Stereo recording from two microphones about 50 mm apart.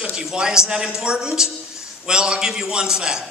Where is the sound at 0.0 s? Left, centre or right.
Centre.